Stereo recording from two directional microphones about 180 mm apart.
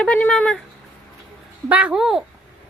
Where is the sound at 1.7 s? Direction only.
5° right (ahead or behind).